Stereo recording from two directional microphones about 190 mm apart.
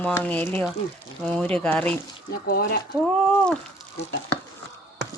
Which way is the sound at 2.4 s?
50° left (ahead or behind).